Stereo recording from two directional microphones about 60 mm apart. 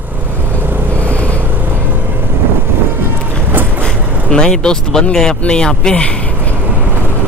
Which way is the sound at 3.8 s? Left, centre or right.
Centre.